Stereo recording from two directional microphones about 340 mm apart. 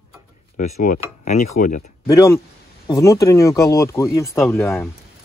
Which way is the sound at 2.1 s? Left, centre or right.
Centre.